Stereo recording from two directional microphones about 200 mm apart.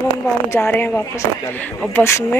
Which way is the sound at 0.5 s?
10° left (ahead or behind).